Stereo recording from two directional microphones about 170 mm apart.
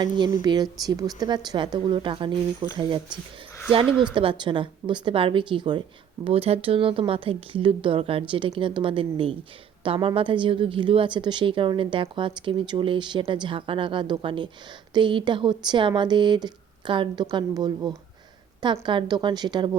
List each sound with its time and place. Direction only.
0.4 s a woman's voice: 25° right (ahead or behind)
4.0 s a woman's voice: 30° right (ahead or behind)